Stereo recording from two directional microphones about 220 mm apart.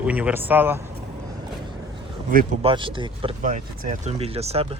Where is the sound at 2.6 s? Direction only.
25° right (ahead or behind).